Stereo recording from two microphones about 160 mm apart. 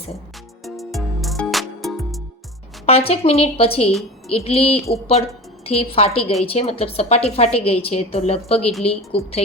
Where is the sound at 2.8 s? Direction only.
40° left (ahead or behind).